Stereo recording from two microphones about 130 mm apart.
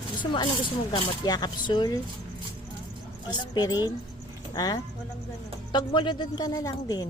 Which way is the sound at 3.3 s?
30° left (ahead or behind).